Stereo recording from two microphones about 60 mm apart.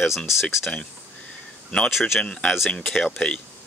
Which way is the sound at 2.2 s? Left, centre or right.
Centre.